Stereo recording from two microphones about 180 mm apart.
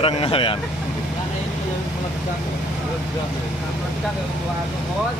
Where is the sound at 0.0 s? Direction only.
30° left (ahead or behind).